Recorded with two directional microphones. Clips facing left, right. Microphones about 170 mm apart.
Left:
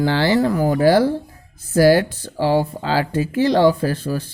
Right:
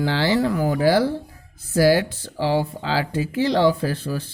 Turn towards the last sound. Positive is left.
turn(degrees=45)  # may be behind; listen again after turning